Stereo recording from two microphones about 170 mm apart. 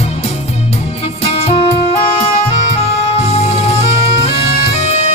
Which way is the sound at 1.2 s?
40° left (ahead or behind).